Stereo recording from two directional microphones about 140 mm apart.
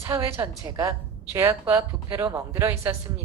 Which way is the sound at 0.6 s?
25° right (ahead or behind).